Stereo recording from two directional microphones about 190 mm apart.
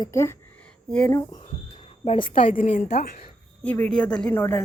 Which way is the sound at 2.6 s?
40° left (ahead or behind).